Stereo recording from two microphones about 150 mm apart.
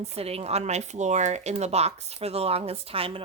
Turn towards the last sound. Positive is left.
turn(degrees=-40)  # may be behind; listen again after turning